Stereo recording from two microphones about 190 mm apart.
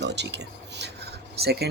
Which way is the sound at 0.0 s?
65° right (ahead or behind).